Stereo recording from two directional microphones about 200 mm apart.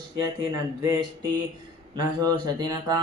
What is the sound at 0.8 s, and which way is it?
Speech, 20° right (ahead or behind).